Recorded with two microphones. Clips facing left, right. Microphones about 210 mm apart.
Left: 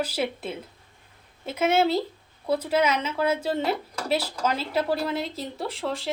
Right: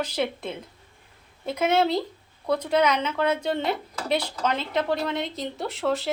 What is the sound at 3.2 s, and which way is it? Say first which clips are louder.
Speech: left 1 dB; 5° left (ahead or behind).